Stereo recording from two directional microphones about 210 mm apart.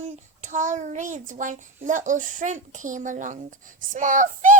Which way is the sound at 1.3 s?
35° right (ahead or behind).